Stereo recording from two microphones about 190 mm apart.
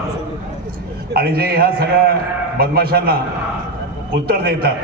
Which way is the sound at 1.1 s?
55° right (ahead or behind).